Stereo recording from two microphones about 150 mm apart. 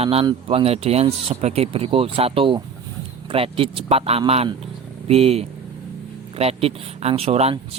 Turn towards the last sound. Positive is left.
turn(degrees=-40)  # may be behind; listen again after turning